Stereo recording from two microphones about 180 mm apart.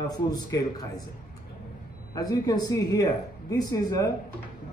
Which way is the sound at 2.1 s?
20° left (ahead or behind).